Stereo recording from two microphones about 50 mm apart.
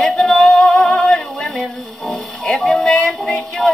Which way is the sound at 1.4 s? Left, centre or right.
Centre.